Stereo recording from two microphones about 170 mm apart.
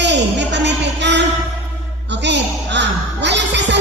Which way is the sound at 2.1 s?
90° right.